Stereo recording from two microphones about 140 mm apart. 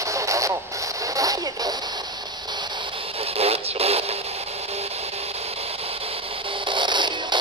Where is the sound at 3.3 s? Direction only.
45° right (ahead or behind).